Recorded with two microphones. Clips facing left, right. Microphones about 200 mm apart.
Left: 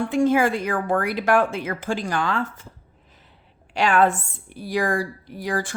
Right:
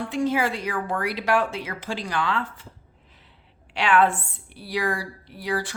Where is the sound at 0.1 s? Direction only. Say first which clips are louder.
Left 5 dB; 50° left (ahead or behind).